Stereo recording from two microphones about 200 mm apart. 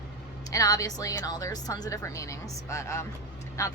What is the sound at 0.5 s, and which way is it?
Speech, 15° left (ahead or behind).